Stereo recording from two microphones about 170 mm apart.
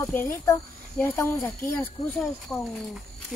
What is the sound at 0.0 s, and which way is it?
Speech, 15° left (ahead or behind).